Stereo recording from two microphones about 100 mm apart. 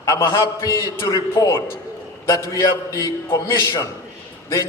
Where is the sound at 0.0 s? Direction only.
30° left (ahead or behind).